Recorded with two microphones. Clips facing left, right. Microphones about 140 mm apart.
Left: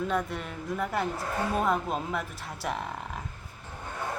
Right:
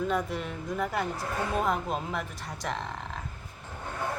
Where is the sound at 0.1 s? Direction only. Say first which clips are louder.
Right 1 dB; centre (ahead or behind).